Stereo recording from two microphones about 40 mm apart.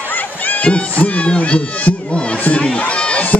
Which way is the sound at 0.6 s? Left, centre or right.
Left.